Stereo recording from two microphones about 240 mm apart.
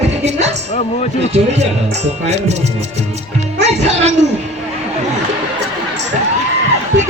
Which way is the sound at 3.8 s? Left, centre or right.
Right.